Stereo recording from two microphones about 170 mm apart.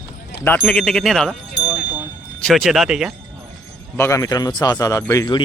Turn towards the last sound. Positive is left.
turn(degrees=20)  # may be behind; listen again after turning